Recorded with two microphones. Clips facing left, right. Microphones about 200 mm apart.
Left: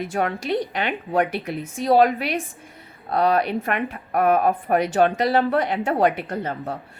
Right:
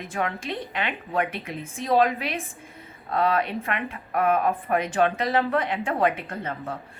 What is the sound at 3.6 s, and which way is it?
A woman's voice, 45° left (ahead or behind).